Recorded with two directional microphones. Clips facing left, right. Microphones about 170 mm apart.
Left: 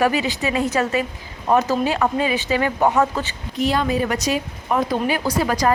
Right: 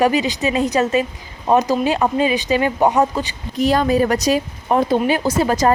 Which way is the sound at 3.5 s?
40° right (ahead or behind).